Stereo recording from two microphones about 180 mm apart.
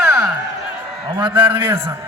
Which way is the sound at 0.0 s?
15° right (ahead or behind).